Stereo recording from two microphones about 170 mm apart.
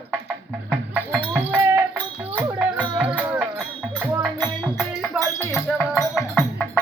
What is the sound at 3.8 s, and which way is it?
Music, centre (ahead or behind).